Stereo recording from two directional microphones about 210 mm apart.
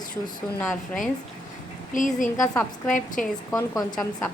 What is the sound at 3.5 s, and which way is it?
Speech, 15° left (ahead or behind).